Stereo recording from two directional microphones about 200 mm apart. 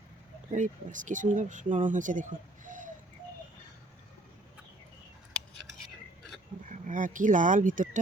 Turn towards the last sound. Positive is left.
turn(degrees=-40)  # may be behind; listen again after turning